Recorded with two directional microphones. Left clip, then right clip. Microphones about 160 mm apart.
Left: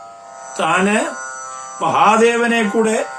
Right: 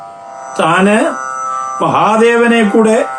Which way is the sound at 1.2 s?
35° left (ahead or behind).